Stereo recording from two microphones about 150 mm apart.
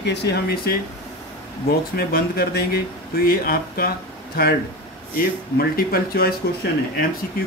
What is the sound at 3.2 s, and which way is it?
Speech, 75° left (ahead or behind).